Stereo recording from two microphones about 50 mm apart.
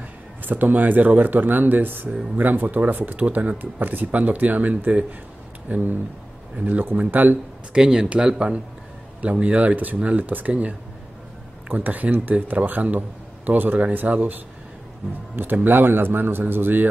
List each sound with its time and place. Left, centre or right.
0.4 s speech: right
7.7 s speech: centre
10.2 s speech: right
11.7 s speech: right
15.5 s speech: right